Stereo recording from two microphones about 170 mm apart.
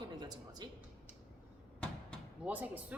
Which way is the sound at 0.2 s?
25° right (ahead or behind).